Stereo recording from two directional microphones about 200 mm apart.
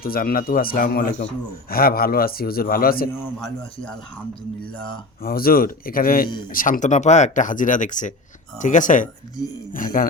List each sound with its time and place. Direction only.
0.0 s a man's voice: 45° left (ahead or behind)
5.2 s a man's voice: 45° left (ahead or behind)